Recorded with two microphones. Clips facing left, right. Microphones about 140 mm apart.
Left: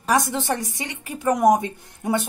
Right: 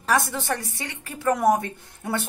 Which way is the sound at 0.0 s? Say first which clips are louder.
Left 2 dB; 15° left (ahead or behind).